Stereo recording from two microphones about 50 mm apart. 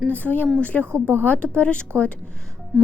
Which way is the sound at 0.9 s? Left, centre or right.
Right.